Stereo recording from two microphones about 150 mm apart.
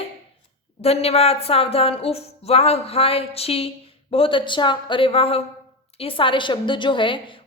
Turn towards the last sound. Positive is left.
turn(degrees=35)  # may be behind; listen again after turning